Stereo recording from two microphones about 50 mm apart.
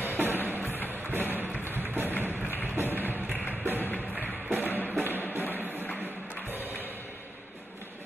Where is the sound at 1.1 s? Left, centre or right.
Right.